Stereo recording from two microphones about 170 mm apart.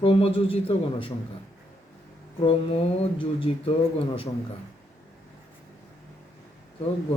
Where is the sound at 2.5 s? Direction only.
35° left (ahead or behind).